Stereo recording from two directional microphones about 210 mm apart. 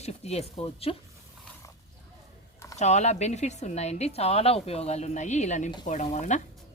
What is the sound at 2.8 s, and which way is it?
Speech, 35° left (ahead or behind).